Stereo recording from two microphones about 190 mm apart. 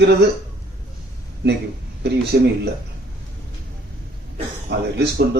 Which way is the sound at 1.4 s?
60° right (ahead or behind).